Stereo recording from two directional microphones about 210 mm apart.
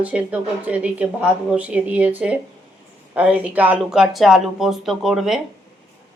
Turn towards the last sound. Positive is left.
turn(degrees=0)  # may be behind; listen again after turning